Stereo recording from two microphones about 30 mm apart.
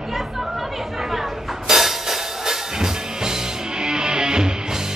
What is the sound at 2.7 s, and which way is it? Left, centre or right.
Music, centre.